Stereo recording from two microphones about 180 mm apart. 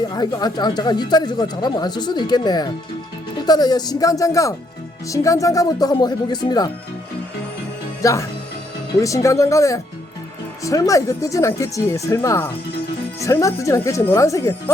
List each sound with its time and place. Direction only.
0.1 s speech: 25° left (ahead or behind)
8.0 s speech: 15° left (ahead or behind)